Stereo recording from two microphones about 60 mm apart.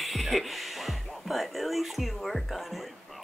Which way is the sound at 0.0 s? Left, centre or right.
Centre.